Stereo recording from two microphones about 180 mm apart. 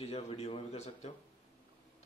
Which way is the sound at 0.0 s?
35° left (ahead or behind).